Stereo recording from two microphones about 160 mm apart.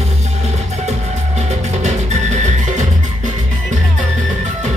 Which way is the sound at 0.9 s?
45° right (ahead or behind).